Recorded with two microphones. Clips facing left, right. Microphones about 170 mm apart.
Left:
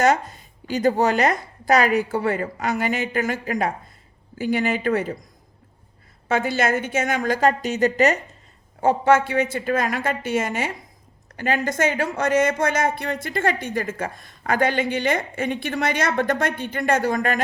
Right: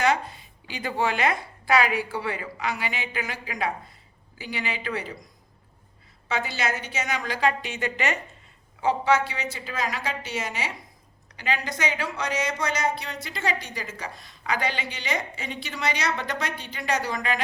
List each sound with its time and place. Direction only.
0.0 s speech: 45° left (ahead or behind)
6.2 s speech: 50° left (ahead or behind)